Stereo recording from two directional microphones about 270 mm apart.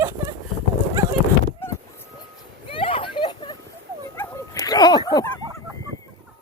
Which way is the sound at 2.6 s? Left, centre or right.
Centre.